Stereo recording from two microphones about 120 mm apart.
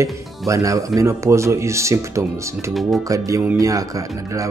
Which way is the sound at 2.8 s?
Centre (ahead or behind).